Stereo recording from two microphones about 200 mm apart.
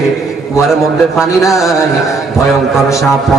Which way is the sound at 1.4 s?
Centre (ahead or behind).